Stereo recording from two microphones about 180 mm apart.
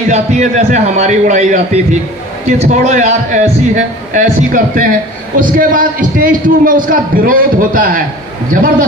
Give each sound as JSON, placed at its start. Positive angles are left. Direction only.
{"t": 0.1, "sound": "a man's voice", "side_deg": -40}